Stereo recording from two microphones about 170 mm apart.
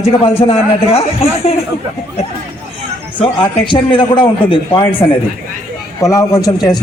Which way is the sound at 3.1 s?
30° left (ahead or behind).